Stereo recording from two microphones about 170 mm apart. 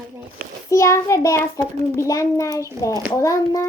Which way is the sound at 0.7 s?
20° left (ahead or behind).